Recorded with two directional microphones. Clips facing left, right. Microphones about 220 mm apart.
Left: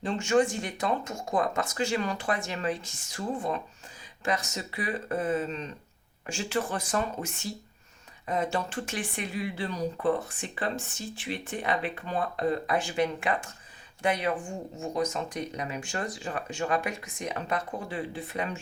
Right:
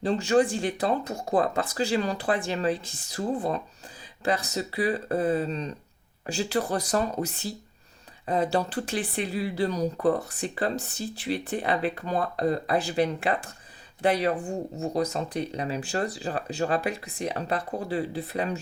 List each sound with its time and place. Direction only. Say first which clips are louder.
0.0 s speech: right 3 dB; 35° right (ahead or behind)